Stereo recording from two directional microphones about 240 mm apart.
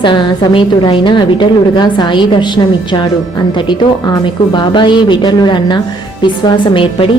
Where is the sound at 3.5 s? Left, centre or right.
Centre.